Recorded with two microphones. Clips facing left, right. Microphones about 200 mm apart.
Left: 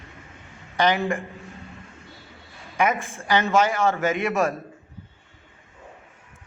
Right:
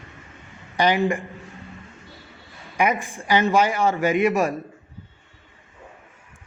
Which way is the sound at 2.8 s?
15° right (ahead or behind).